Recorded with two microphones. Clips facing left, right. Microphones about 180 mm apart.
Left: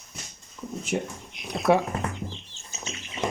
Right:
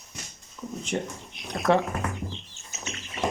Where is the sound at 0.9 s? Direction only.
5° left (ahead or behind).